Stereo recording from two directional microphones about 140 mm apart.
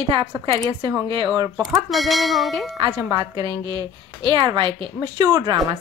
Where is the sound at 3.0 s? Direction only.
25° right (ahead or behind).